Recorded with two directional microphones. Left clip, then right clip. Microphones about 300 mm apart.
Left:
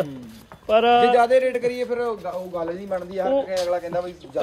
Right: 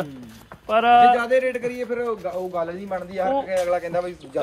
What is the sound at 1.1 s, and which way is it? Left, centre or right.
Speech, centre.